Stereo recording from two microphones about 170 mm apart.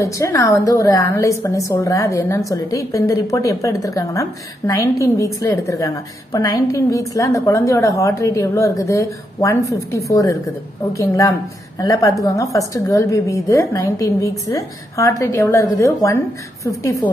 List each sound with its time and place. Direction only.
0.0 s a woman's voice: 20° left (ahead or behind)